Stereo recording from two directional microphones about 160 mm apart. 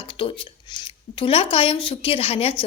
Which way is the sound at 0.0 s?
35° left (ahead or behind).